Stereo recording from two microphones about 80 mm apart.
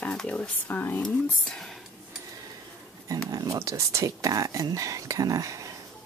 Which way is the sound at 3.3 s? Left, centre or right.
Right.